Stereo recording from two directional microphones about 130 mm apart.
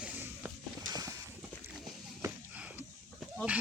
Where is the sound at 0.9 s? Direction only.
30° right (ahead or behind).